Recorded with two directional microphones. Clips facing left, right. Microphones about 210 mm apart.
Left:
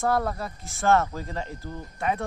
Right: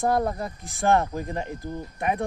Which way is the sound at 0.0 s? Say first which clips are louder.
Right 2 dB; 20° right (ahead or behind).